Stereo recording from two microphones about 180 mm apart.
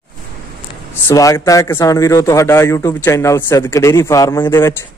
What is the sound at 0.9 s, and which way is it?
A man's voice, 15° left (ahead or behind).